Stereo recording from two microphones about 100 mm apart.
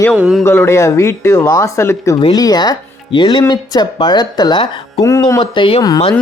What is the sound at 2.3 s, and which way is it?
Speech, 40° left (ahead or behind).